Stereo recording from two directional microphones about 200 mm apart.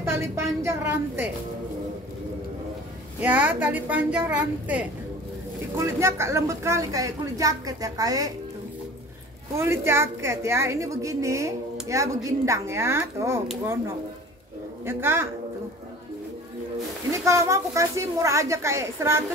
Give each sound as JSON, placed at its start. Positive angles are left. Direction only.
{"t": 0.0, "sound": "a woman's voice", "side_deg": -15}
{"t": 3.2, "sound": "a woman's voice", "side_deg": -10}
{"t": 9.6, "sound": "a woman's voice", "side_deg": -10}
{"t": 14.9, "sound": "a woman's voice", "side_deg": -10}
{"t": 17.2, "sound": "a woman's voice", "side_deg": -15}